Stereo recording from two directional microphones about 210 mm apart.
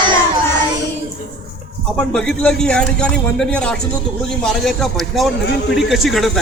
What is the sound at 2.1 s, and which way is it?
A man's voice, 5° left (ahead or behind).